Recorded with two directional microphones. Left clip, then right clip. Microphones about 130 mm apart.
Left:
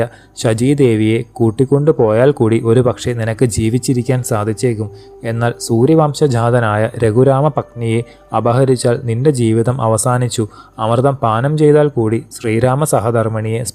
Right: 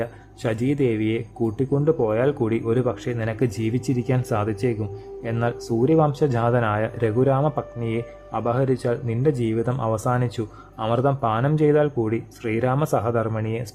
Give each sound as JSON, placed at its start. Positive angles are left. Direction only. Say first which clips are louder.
{"t": 0.0, "sound": "speech", "louder": "left 10 dB", "side_deg": 40}